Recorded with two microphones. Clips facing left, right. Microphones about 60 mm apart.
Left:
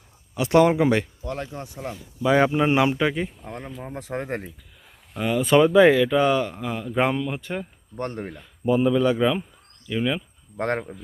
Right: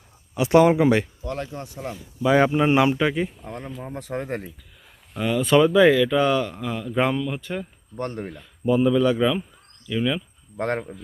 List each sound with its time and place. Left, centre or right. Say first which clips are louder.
0.3 s speech: right 1 dB; centre
3.4 s speech: right 1 dB; centre
4.1 s speech: even; left
5.1 s speech: even; centre
5.4 s speech: left 1 dB; left
10.6 s a man's voice: even; left